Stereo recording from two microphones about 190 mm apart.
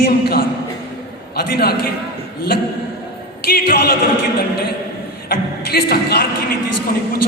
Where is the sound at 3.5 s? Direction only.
55° left (ahead or behind).